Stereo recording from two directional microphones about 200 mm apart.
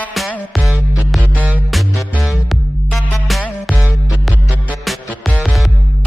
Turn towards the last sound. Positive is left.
turn(degrees=0)  # may be behind; listen again after turning